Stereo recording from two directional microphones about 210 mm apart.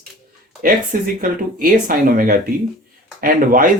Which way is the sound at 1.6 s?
45° right (ahead or behind).